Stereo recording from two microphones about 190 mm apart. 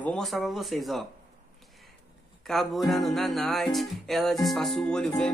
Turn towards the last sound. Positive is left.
turn(degrees=5)  # may be behind; listen again after turning